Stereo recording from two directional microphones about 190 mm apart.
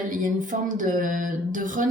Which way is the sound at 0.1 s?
45° right (ahead or behind).